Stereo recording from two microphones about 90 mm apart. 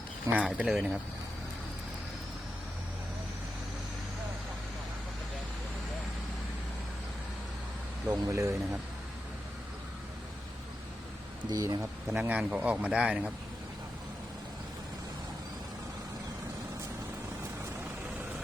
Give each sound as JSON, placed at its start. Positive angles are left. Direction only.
{"t": 0.3, "sound": "speech", "side_deg": -10}
{"t": 8.0, "sound": "speech", "side_deg": -40}
{"t": 11.5, "sound": "speech", "side_deg": -40}
{"t": 12.3, "sound": "speech", "side_deg": -10}